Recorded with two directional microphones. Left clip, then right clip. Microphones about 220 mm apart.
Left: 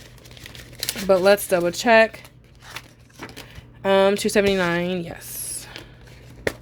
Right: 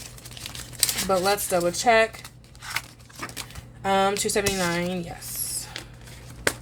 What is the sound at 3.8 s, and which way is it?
Speech, 45° left (ahead or behind).